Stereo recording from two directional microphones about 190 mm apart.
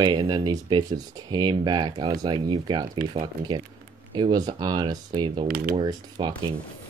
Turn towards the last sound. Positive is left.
turn(degrees=-25)  # may be behind; listen again after turning